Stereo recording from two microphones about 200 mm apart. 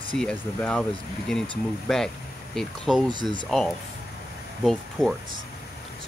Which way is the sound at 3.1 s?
20° right (ahead or behind).